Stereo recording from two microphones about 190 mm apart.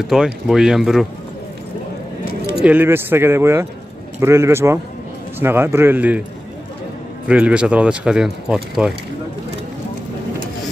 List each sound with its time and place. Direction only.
0.0 s speech: centre (ahead or behind)
2.6 s speech: 10° right (ahead or behind)
7.2 s speech: 5° right (ahead or behind)